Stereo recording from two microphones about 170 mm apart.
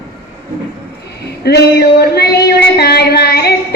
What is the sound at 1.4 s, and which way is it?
Music, 70° left (ahead or behind).